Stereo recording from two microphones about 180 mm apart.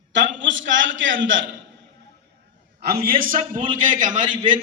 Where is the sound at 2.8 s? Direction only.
55° right (ahead or behind).